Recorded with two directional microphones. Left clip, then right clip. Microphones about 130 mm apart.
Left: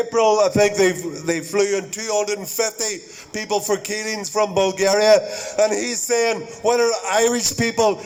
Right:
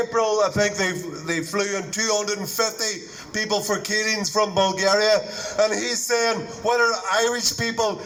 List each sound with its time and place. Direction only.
0.2 s a man's voice: 60° left (ahead or behind)